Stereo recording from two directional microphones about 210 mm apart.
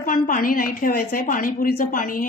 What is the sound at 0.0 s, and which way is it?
A woman's voice, 40° left (ahead or behind).